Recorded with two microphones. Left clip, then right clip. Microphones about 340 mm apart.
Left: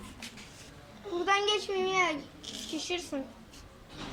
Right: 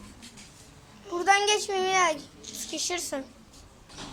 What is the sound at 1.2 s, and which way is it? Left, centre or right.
A child's voice, right.